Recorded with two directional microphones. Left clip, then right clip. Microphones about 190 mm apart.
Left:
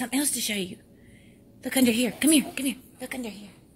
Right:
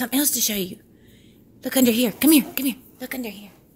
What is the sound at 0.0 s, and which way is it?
A woman's voice, 35° right (ahead or behind).